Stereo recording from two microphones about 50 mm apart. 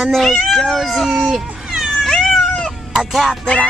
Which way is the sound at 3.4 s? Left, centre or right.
Left.